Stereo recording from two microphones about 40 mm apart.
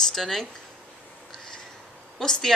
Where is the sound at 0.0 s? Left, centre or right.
Centre.